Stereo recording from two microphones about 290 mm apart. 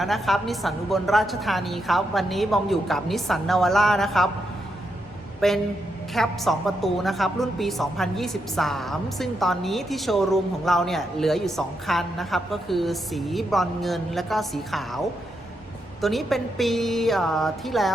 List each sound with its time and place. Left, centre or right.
0.0 s a woman's voice: centre
5.4 s a woman's voice: centre